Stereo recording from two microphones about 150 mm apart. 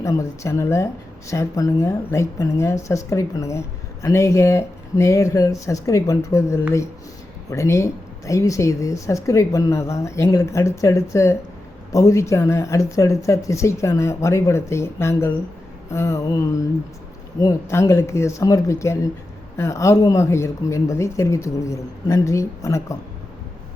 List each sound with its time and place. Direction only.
0.0 s a woman's voice: 20° left (ahead or behind)